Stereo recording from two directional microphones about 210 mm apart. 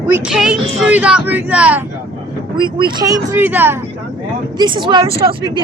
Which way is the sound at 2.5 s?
20° right (ahead or behind).